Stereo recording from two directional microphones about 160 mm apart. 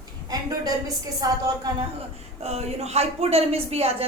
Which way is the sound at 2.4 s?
45° right (ahead or behind).